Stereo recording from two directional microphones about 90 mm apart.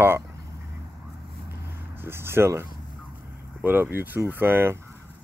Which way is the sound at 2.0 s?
25° right (ahead or behind).